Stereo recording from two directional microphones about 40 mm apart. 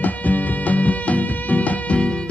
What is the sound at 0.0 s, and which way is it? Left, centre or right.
Music, left.